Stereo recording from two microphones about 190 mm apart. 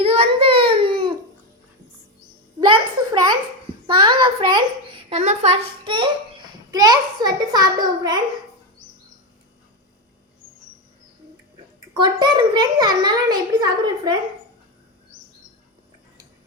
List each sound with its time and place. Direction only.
0.0 s baby cry: 30° right (ahead or behind)
2.6 s a sound: 25° right (ahead or behind)
5.0 s a child's voice: 35° right (ahead or behind)
11.9 s a child's voice: 25° right (ahead or behind)